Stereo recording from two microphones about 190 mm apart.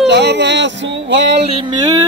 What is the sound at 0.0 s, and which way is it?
Music, 65° right (ahead or behind).